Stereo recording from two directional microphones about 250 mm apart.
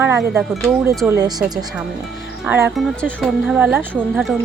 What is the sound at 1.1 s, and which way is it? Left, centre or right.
Speech, centre.